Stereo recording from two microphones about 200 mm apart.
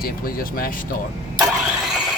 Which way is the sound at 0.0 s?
45° left (ahead or behind).